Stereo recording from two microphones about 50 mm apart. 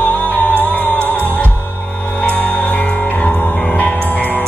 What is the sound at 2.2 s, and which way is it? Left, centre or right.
Music, left.